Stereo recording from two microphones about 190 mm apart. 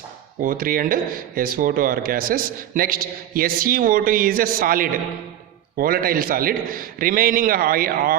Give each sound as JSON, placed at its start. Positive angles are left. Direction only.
{"t": 0.4, "sound": "a man's voice", "side_deg": -50}